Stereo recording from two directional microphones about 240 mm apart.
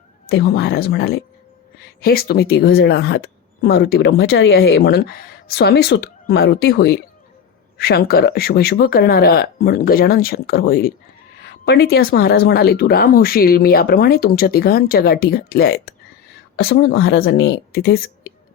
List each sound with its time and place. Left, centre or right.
0.3 s a woman's voice: left